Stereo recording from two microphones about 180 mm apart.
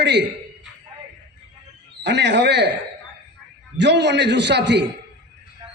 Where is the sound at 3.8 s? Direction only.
70° right (ahead or behind).